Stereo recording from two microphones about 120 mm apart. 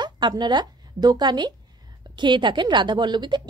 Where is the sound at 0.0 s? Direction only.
40° right (ahead or behind).